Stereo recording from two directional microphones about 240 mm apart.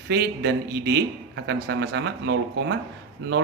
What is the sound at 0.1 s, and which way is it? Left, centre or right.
Speech, right.